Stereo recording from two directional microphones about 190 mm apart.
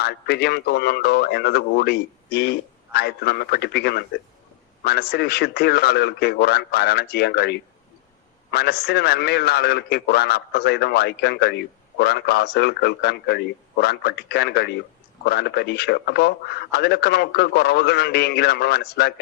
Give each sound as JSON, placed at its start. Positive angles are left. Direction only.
{"t": 0.0, "sound": "a man's voice", "side_deg": 60}